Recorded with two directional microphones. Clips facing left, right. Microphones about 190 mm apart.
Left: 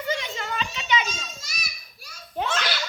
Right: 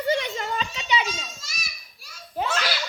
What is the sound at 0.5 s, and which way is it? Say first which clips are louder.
Children playing: left 3 dB; 35° right (ahead or behind).